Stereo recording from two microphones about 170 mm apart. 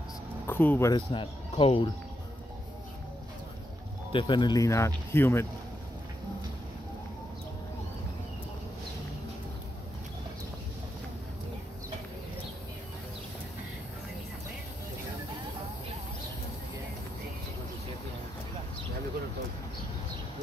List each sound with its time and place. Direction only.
0.5 s speech: 10° left (ahead or behind)
0.9 s speech: 30° left (ahead or behind)
4.1 s speech: 30° left (ahead or behind); by 5.5 s 15° left (ahead or behind)